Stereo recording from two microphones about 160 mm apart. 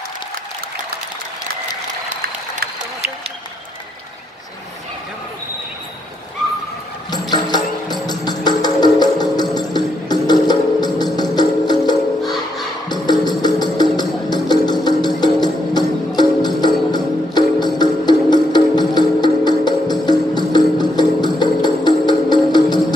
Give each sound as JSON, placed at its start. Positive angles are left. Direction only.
{"t": 7.1, "sound": "music", "side_deg": 25}
{"t": 12.2, "sound": "music", "side_deg": 0}
{"t": 12.8, "sound": "music", "side_deg": 25}